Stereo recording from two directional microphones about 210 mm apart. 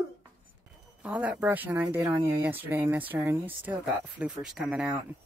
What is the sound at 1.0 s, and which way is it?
Speech, 5° right (ahead or behind).